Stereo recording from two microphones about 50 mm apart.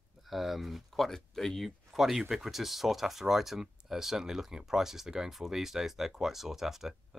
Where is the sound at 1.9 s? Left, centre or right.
Centre.